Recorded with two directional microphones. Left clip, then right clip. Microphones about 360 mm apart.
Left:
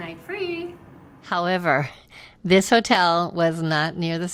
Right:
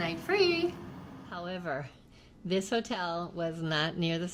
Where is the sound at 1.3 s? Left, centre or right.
Left.